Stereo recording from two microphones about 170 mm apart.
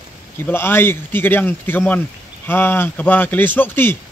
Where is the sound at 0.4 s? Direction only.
15° left (ahead or behind).